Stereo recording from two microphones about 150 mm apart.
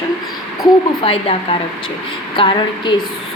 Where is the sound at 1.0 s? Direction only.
40° left (ahead or behind).